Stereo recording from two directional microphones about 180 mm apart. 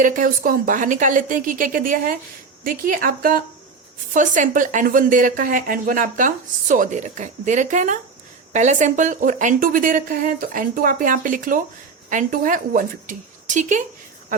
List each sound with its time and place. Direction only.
0.0 s speech: 50° right (ahead or behind)